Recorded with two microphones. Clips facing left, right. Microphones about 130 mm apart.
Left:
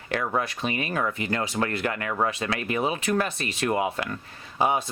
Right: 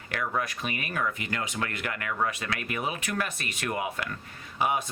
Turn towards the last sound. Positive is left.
turn(degrees=30)  # may be behind; listen again after turning